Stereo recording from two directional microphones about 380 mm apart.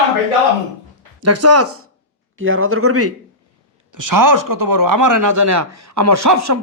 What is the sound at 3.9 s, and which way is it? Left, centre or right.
Speech, right.